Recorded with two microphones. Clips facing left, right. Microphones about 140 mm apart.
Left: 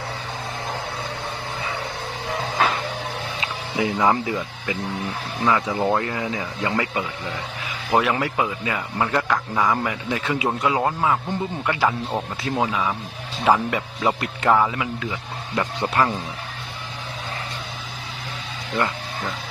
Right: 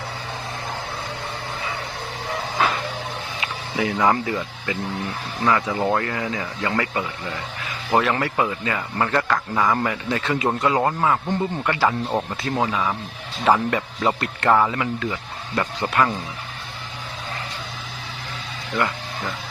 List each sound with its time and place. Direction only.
3.8 s a man's voice: 20° left (ahead or behind)
18.7 s speech: 25° left (ahead or behind)